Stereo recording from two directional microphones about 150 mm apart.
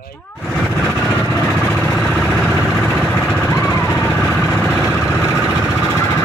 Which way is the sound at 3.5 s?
20° left (ahead or behind).